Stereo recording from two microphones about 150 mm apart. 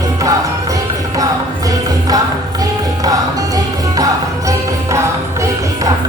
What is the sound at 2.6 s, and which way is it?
Music, 25° right (ahead or behind).